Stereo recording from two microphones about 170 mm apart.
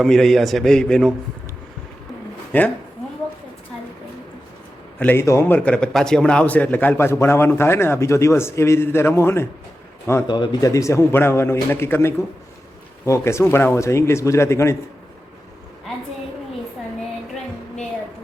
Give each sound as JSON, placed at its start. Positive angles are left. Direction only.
{"t": 0.0, "sound": "a man's voice", "side_deg": 0}
{"t": 2.5, "sound": "a man's voice", "side_deg": 10}
{"t": 4.9, "sound": "a man's voice", "side_deg": 10}
{"t": 10.2, "sound": "a man's voice", "side_deg": 25}